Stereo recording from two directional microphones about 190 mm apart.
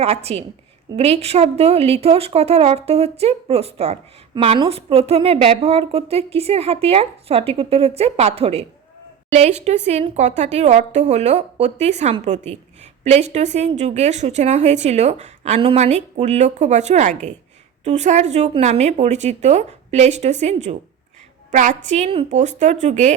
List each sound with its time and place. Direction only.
0.0 s speech: 35° right (ahead or behind)